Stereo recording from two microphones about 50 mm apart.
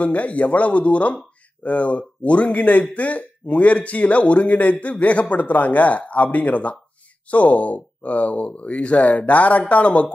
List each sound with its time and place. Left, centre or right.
0.0 s speech: left